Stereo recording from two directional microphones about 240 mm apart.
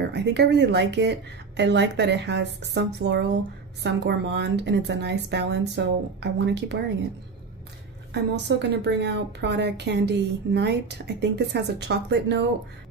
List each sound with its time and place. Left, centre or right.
0.1 s a woman's voice: right
8.1 s a woman's voice: right